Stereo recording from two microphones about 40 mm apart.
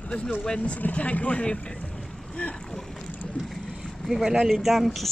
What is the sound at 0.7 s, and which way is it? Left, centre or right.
Speech, left.